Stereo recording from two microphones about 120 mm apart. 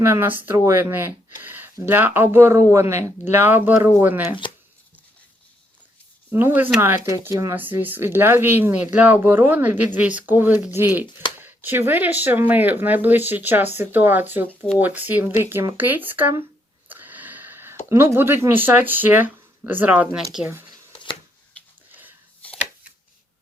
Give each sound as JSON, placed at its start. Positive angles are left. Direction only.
{"t": 0.0, "sound": "speech", "side_deg": -20}
{"t": 1.4, "sound": "a sound", "side_deg": -15}
{"t": 1.8, "sound": "speech", "side_deg": -15}
{"t": 6.3, "sound": "speech", "side_deg": -15}
{"t": 16.9, "sound": "a sound", "side_deg": -15}
{"t": 17.8, "sound": "speech", "side_deg": -20}
{"t": 20.9, "sound": "shuffling cards", "side_deg": 45}